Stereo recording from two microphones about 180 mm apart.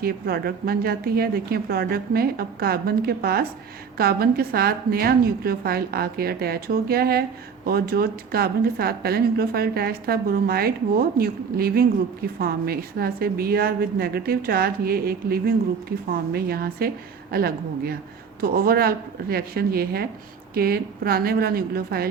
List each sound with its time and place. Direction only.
0.0 s a woman's voice: 60° right (ahead or behind)